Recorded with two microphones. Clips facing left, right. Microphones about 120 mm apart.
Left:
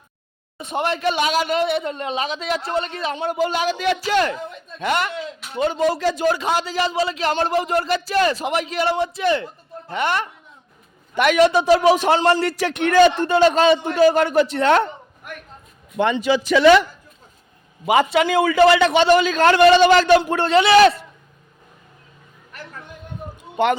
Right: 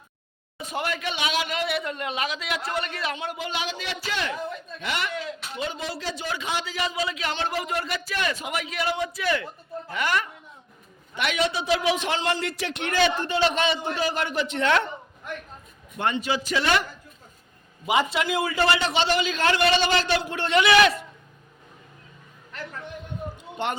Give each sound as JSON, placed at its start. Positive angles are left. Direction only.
{"t": 0.7, "sound": "a man's voice", "side_deg": 25}
{"t": 1.1, "sound": "a man's voice", "side_deg": 45}
{"t": 3.2, "sound": "a man's voice", "side_deg": 40}
{"t": 11.1, "sound": "a man's voice", "side_deg": 50}
{"t": 16.0, "sound": "speech", "side_deg": 90}
{"t": 17.8, "sound": "a man's voice", "side_deg": 60}